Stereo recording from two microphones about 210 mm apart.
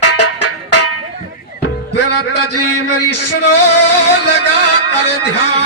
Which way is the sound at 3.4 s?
90° left.